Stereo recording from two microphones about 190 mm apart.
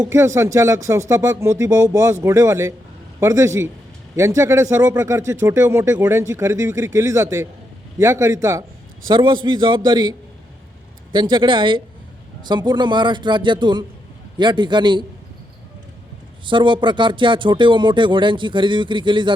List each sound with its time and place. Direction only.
0.0 s speech: 15° right (ahead or behind)
16.5 s speech: 25° right (ahead or behind)